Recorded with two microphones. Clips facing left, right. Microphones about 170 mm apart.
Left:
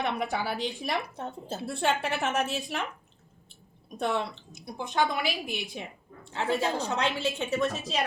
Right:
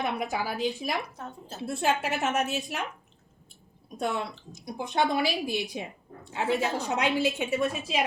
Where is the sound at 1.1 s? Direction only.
30° left (ahead or behind).